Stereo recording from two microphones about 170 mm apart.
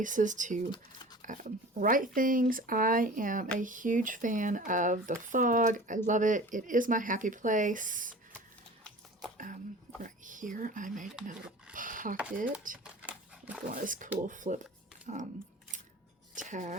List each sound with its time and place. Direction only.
0.0 s speech: 50° right (ahead or behind)
10.0 s speech: 50° right (ahead or behind)
11.7 s a sound: 50° right (ahead or behind)
12.8 s dog: 10° right (ahead or behind)
13.7 s speech: 50° right (ahead or behind)
16.3 s speech: 45° right (ahead or behind)